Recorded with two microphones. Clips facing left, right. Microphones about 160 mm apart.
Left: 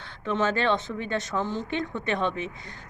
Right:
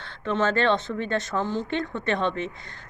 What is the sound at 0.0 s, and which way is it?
Speech, 15° left (ahead or behind).